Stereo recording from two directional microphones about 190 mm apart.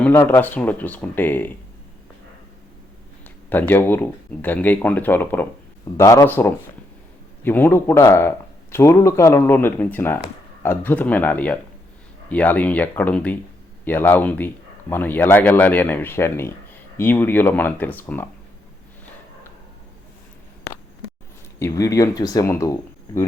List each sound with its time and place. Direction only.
0.0 s speech: 10° left (ahead or behind)
3.2 s speech: 10° left (ahead or behind)
21.6 s speech: 15° left (ahead or behind)